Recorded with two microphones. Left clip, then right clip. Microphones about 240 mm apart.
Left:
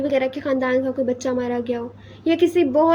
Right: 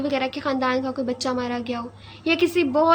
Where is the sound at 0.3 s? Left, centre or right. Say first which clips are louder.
Left 3 dB; right.